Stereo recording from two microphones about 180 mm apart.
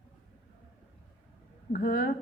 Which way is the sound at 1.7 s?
55° left (ahead or behind).